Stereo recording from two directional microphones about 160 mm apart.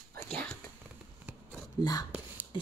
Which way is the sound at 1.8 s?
25° left (ahead or behind).